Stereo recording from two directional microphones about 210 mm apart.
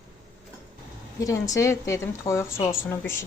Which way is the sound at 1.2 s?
15° left (ahead or behind).